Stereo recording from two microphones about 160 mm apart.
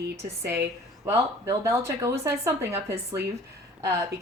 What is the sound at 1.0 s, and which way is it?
Speech, 15° right (ahead or behind).